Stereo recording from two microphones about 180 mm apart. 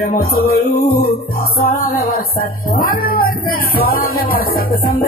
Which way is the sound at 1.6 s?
55° left (ahead or behind).